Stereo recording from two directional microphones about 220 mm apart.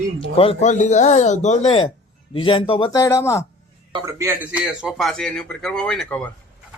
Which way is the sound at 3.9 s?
15° right (ahead or behind).